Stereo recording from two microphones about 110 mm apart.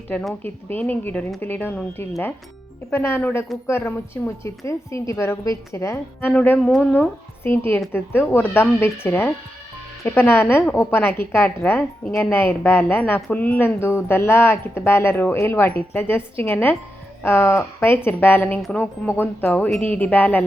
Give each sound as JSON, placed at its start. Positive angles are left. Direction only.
{"t": 0.4, "sound": "speech", "side_deg": 15}
{"t": 6.6, "sound": "speech", "side_deg": 0}
{"t": 6.9, "sound": "a woman's voice", "side_deg": 20}